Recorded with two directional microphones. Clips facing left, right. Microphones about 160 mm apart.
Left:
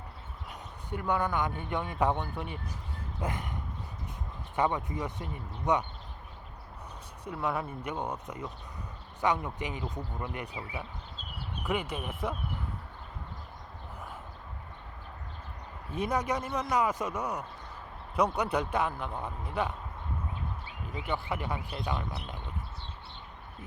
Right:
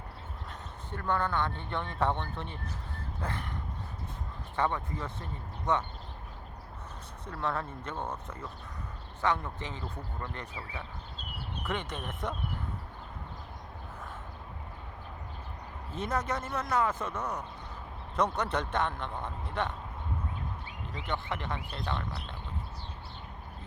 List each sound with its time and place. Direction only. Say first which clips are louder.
0.9 s speech: left 1 dB; 15° left (ahead or behind)
4.5 s speech: left 2 dB; 15° left (ahead or behind)
7.3 s speech: left 2 dB; 10° left (ahead or behind)
15.9 s speech: left 2 dB; 15° left (ahead or behind)
20.8 s speech: left 2 dB; 10° left (ahead or behind)